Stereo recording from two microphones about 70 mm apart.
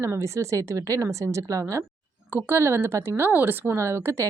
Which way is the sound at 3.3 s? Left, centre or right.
Right.